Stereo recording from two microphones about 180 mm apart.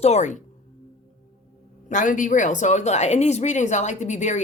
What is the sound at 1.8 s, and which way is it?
Speech, 45° left (ahead or behind).